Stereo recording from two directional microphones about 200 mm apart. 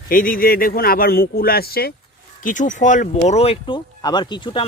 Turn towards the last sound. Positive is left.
turn(degrees=25)  # may be behind; listen again after turning